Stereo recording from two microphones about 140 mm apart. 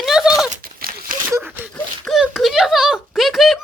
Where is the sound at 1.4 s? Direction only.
15° right (ahead or behind).